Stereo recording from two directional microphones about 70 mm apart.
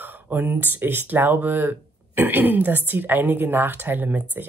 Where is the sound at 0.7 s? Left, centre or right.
Right.